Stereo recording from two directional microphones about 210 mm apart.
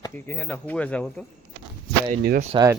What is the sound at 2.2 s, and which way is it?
Speech, 50° right (ahead or behind).